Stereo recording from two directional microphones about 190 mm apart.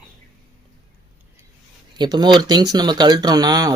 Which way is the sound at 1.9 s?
20° right (ahead or behind).